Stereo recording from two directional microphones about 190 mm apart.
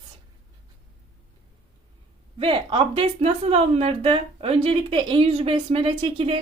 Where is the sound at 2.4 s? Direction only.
25° right (ahead or behind).